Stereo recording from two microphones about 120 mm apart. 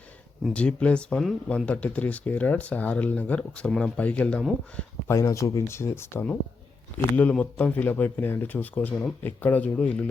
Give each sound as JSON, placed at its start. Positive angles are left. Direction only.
{"t": 0.5, "sound": "speech", "side_deg": 10}
{"t": 5.0, "sound": "speech", "side_deg": 25}